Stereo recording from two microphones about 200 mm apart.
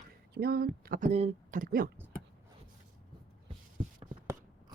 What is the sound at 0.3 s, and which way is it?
Speech, 50° right (ahead or behind).